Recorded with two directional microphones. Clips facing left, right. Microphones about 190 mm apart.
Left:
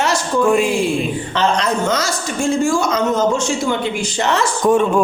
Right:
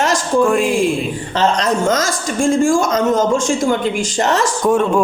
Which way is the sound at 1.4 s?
45° right (ahead or behind).